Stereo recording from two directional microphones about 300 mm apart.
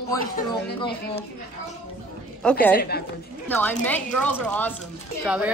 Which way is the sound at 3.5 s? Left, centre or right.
Centre.